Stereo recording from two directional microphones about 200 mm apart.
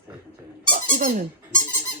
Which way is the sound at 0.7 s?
40° right (ahead or behind).